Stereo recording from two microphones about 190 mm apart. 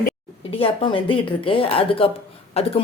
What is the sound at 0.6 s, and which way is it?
Speech, 25° left (ahead or behind).